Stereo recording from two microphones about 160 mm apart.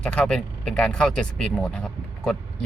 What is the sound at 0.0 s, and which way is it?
Speech, 5° left (ahead or behind).